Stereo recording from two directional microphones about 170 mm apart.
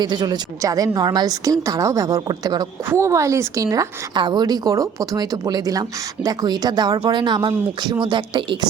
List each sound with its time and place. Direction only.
0.0 s a woman's voice: 25° right (ahead or behind)